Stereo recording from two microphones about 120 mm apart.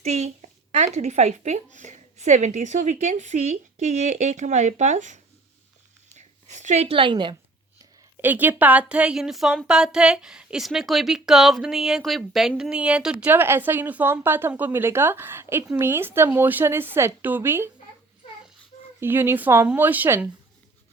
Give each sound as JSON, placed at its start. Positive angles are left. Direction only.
{"t": 0.0, "sound": "a woman's voice", "side_deg": -65}
{"t": 6.1, "sound": "a sound", "side_deg": -85}
{"t": 6.8, "sound": "a woman's voice", "side_deg": -45}
{"t": 8.2, "sound": "a woman's voice", "side_deg": -15}
{"t": 18.9, "sound": "a woman's voice", "side_deg": -20}